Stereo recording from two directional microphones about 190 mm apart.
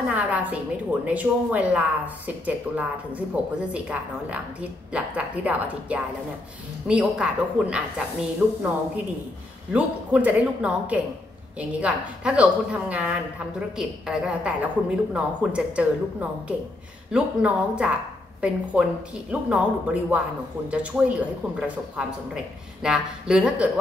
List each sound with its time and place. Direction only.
0.1 s a woman's voice: 5° right (ahead or behind)
9.7 s a woman's voice: 5° right (ahead or behind)